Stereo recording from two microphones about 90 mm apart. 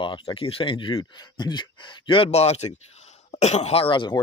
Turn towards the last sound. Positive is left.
turn(degrees=75)  # may be behind; listen again after turning